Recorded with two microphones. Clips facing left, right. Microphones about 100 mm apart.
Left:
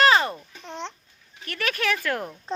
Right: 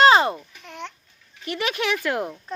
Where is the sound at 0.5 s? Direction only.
25° left (ahead or behind).